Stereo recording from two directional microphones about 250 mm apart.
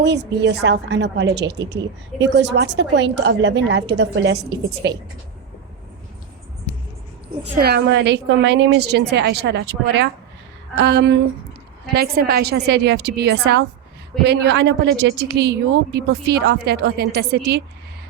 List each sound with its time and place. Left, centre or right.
0.0 s a woman's voice: right
7.4 s a woman's voice: right